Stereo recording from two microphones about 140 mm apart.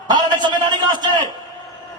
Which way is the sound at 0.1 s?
30° right (ahead or behind).